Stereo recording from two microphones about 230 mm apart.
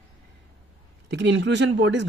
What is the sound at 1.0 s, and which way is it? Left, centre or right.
A man's voice, right.